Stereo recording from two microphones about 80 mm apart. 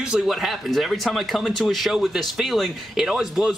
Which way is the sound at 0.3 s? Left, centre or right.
Centre.